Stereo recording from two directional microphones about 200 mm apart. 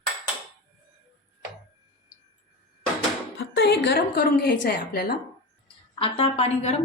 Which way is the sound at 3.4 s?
60° left (ahead or behind).